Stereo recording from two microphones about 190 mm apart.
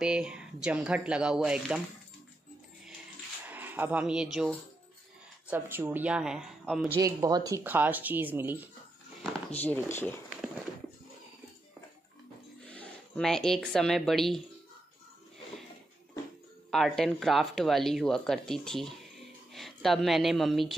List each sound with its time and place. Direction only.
0.0 s speech: 5° right (ahead or behind)
3.4 s speech: 10° right (ahead or behind)
7.0 s speech: 20° right (ahead or behind)
10.3 s a sound: 5° right (ahead or behind)
12.6 s speech: 5° left (ahead or behind)
16.7 s speech: centre (ahead or behind)